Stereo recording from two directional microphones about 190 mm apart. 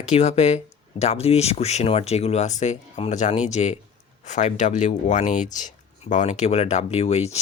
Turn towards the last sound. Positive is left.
turn(degrees=35)  # may be behind; listen again after turning